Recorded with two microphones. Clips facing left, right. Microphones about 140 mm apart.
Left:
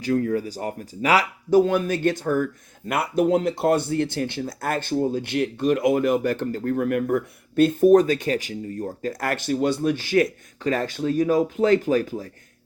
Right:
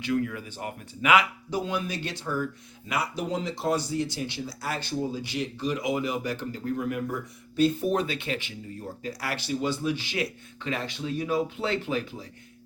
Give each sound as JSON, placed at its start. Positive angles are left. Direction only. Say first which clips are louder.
{"t": 0.0, "sound": "speech", "louder": "left 6 dB", "side_deg": 40}